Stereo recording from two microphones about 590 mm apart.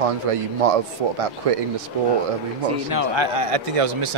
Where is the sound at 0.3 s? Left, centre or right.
Right.